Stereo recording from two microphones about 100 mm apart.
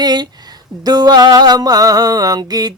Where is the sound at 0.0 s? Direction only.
45° right (ahead or behind).